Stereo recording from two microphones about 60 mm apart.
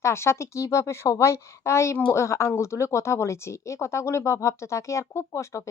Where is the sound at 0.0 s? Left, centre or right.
Left.